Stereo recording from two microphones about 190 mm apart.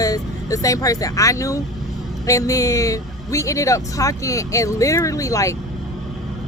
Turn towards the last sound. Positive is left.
turn(degrees=15)  # may be behind; listen again after turning